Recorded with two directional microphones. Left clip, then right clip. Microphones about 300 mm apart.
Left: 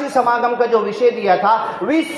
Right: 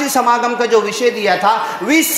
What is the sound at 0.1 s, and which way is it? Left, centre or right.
A man's voice, right.